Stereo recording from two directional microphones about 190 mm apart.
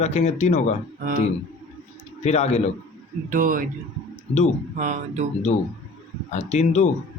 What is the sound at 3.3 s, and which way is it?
Speech, 45° right (ahead or behind).